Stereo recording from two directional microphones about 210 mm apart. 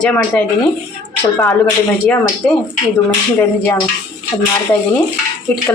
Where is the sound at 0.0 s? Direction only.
5° left (ahead or behind).